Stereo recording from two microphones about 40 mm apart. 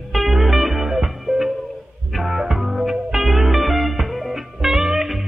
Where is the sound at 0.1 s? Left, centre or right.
Centre.